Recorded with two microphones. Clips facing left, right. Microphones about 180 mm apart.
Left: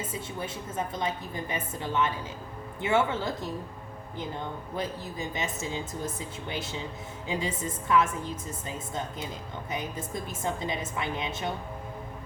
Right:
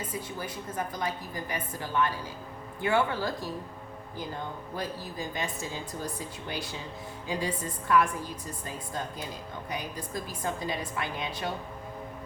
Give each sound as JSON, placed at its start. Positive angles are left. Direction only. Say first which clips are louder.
{"t": 0.1, "sound": "a woman's voice", "louder": "left 1 dB", "side_deg": 25}
{"t": 4.8, "sound": "a woman's voice", "louder": "left 2 dB", "side_deg": 20}